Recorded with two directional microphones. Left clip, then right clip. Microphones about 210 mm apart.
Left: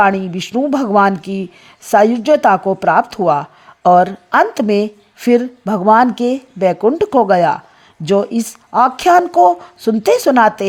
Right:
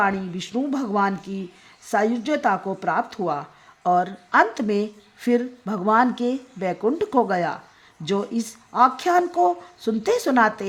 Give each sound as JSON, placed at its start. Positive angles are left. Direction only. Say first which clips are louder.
{"t": 0.0, "sound": "speech", "louder": "left 10 dB", "side_deg": 35}